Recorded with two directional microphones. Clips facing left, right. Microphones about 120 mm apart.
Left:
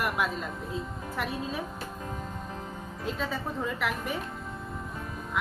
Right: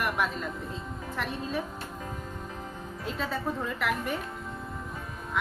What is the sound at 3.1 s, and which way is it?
A woman's voice, centre (ahead or behind).